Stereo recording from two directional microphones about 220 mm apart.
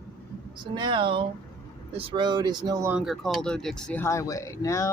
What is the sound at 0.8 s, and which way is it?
Speech, 20° right (ahead or behind).